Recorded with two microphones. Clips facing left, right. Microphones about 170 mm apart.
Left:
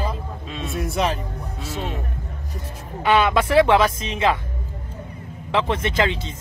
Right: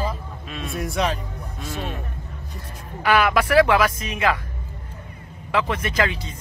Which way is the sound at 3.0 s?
25° left (ahead or behind).